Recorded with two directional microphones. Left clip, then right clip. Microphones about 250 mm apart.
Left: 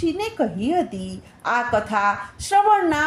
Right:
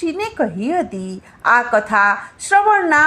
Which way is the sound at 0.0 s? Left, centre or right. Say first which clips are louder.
Right 3 dB; centre.